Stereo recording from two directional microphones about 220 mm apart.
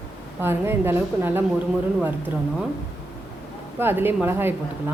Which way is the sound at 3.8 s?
10° right (ahead or behind).